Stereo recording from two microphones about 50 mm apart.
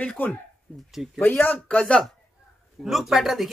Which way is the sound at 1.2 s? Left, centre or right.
Left.